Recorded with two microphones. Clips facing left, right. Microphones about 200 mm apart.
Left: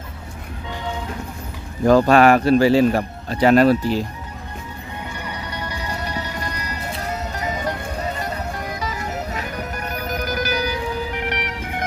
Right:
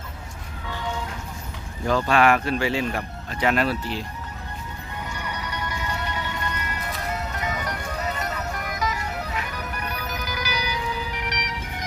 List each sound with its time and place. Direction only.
1.9 s speech: 40° left (ahead or behind)
5.4 s music: 30° left (ahead or behind); by 11.9 s 55° left (ahead or behind)